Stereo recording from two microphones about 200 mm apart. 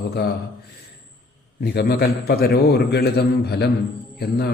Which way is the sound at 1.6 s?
55° left (ahead or behind).